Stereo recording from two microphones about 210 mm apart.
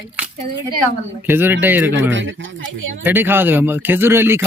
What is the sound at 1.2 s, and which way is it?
Speech, 10° right (ahead or behind).